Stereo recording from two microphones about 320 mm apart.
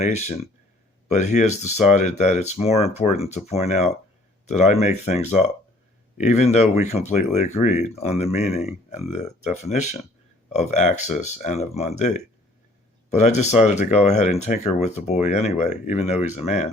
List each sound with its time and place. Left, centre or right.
0.0 s speech: left